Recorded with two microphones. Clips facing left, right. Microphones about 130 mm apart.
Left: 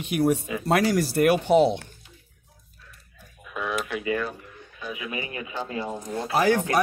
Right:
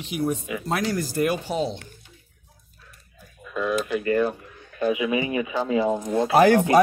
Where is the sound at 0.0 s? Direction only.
65° left (ahead or behind).